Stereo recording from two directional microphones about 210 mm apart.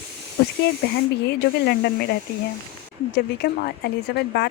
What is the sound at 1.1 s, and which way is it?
Speech, 50° left (ahead or behind).